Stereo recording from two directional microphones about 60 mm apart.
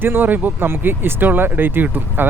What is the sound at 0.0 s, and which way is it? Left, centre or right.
Speech, right.